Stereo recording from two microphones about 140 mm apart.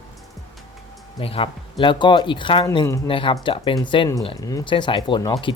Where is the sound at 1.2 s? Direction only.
40° left (ahead or behind).